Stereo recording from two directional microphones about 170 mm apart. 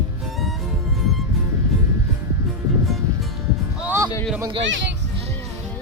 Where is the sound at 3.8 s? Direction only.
10° right (ahead or behind).